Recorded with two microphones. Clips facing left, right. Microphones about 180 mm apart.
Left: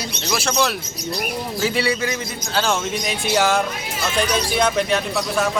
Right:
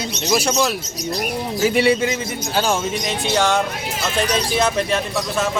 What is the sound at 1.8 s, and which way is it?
Speech, 20° right (ahead or behind).